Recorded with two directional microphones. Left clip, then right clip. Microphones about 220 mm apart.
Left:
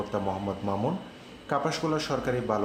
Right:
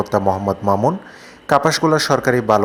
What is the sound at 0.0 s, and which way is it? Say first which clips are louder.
A man's voice: right 13 dB; 45° right (ahead or behind).